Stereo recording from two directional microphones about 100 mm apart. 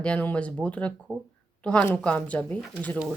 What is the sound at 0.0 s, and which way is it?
Speech, 15° left (ahead or behind).